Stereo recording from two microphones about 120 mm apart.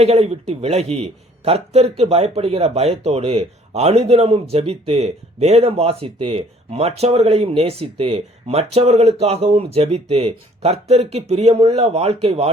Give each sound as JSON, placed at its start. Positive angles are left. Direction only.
{"t": 0.0, "sound": "a man's voice", "side_deg": -60}